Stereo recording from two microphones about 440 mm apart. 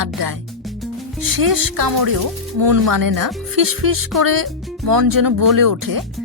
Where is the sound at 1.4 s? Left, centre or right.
Right.